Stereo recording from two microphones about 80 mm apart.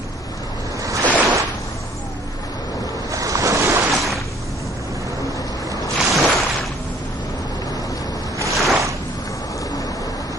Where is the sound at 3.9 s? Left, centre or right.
Centre.